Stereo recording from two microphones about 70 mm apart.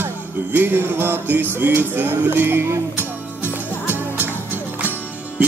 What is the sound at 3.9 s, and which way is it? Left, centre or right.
Music, right.